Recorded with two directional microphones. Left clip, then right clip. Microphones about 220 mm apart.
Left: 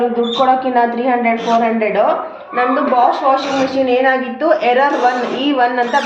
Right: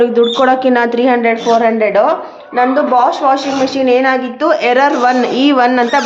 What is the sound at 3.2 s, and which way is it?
A woman's voice, 40° right (ahead or behind).